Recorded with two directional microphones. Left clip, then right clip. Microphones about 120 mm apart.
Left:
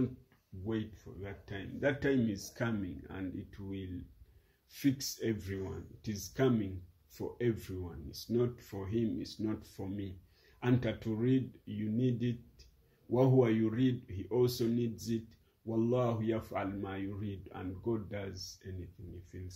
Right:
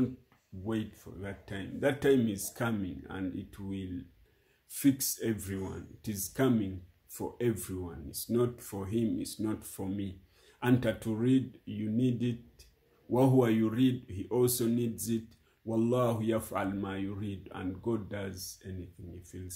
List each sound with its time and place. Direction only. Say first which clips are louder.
0.7 s speech: right 2 dB; 30° right (ahead or behind)